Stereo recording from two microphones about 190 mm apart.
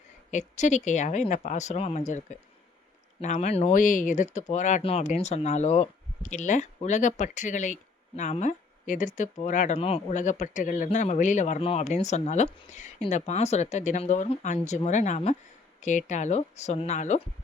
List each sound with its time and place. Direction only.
0.3 s speech: 40° left (ahead or behind)